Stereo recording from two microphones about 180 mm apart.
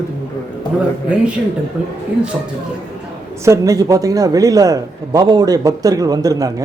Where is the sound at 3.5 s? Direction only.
20° right (ahead or behind).